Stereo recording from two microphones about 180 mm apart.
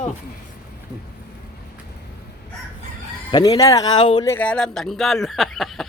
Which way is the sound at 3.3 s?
20° left (ahead or behind).